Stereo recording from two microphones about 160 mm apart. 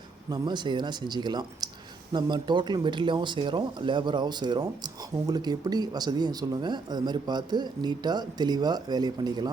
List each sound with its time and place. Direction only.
0.3 s speech: 25° right (ahead or behind)